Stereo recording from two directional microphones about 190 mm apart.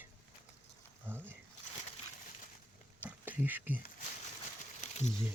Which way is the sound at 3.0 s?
10° right (ahead or behind).